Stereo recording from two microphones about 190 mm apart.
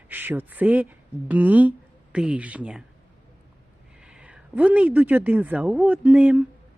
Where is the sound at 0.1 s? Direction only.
10° right (ahead or behind).